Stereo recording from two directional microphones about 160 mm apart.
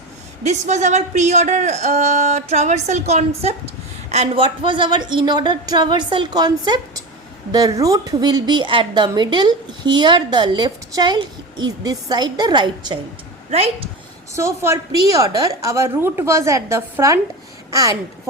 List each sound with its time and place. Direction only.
0.4 s a woman's voice: 45° right (ahead or behind); by 13.0 s 30° right (ahead or behind)
14.3 s a woman's voice: 15° right (ahead or behind)